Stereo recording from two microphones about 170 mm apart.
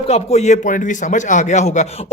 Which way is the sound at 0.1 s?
40° left (ahead or behind).